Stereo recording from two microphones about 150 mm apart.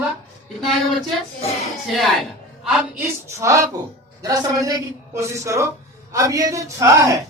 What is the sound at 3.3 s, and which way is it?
A man's voice, 20° right (ahead or behind).